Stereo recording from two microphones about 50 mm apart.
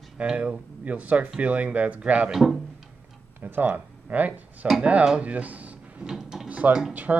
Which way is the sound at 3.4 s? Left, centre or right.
Right.